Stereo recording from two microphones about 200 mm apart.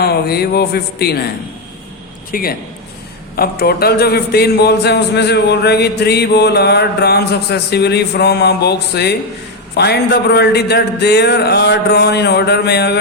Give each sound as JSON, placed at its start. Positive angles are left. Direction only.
{"t": 0.0, "sound": "speech", "side_deg": 50}
{"t": 2.3, "sound": "a man's voice", "side_deg": 50}